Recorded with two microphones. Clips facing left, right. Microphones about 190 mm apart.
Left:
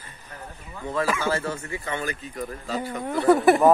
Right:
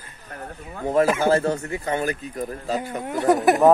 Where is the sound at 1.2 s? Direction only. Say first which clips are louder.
Right 7 dB; 50° right (ahead or behind).